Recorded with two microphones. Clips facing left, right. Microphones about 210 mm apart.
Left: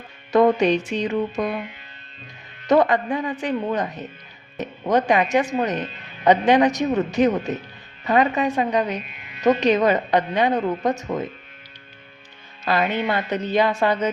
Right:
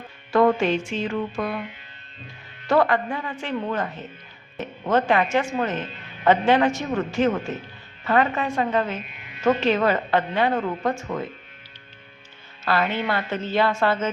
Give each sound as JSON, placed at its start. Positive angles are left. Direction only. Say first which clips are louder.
{"t": 0.3, "sound": "speech", "louder": "left 2 dB", "side_deg": 20}
{"t": 2.6, "sound": "a woman's voice", "louder": "left 3 dB", "side_deg": 20}
{"t": 12.6, "sound": "a woman's voice", "louder": "left 2 dB", "side_deg": 15}